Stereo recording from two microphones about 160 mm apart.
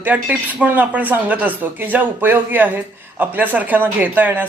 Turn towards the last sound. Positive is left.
turn(degrees=-10)  # may be behind; listen again after turning